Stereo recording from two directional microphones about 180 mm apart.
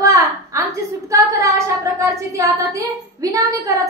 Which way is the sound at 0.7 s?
15° right (ahead or behind).